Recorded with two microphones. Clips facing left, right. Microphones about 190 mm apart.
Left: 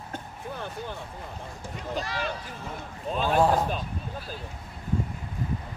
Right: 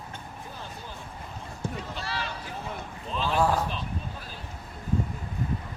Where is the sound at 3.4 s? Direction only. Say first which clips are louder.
Left 2 dB; 20° left (ahead or behind).